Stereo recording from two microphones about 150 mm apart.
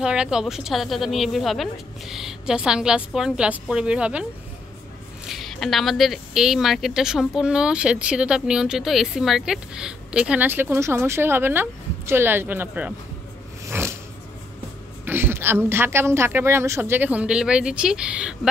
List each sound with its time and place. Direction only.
0.0 s speech: 5° right (ahead or behind)
13.7 s a sound: 15° right (ahead or behind)
15.0 s a woman's voice: 15° right (ahead or behind)